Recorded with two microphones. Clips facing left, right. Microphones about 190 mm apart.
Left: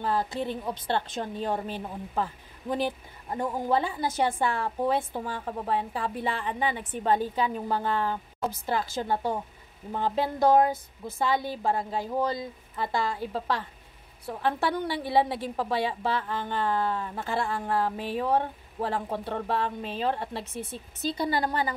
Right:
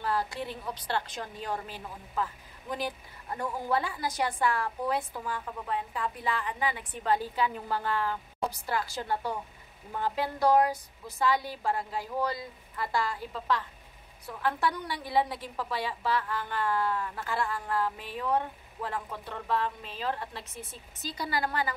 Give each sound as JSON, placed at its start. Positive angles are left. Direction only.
{"t": 0.0, "sound": "a woman's voice", "side_deg": 20}